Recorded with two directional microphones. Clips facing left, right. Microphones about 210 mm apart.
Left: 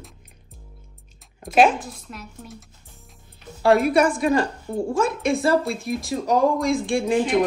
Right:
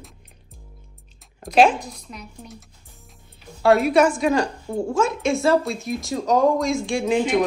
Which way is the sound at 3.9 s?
50° left (ahead or behind).